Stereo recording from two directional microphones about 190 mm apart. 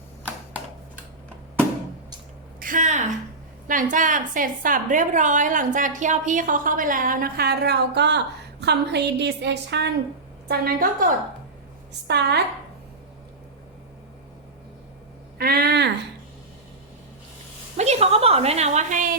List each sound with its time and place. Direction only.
2.6 s a sound: 45° right (ahead or behind)
3.7 s a woman's voice: 45° right (ahead or behind); by 9.9 s 65° right (ahead or behind)
10.5 s a woman's voice: 50° right (ahead or behind)
12.0 s a woman's voice: 60° right (ahead or behind)
15.4 s a woman's voice: 55° right (ahead or behind)
17.7 s a woman's voice: 35° right (ahead or behind)